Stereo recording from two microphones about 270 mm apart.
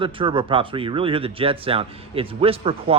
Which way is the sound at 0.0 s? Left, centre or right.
Centre.